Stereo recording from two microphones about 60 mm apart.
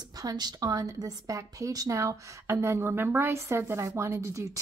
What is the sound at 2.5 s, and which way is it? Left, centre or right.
A woman's voice, right.